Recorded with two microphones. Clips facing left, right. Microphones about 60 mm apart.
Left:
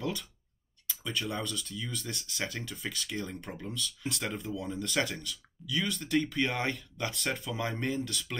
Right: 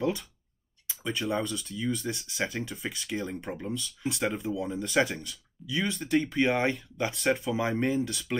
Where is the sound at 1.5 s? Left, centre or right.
Centre.